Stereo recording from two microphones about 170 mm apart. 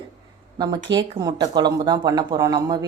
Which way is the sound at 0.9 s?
30° right (ahead or behind).